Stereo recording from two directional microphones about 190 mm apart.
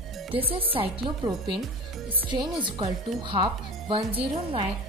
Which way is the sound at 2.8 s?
25° right (ahead or behind).